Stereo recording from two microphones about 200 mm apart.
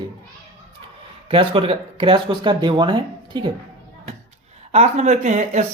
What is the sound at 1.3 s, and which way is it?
Speech, 25° right (ahead or behind).